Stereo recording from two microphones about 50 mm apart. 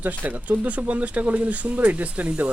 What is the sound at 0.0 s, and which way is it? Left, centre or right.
Speech, right.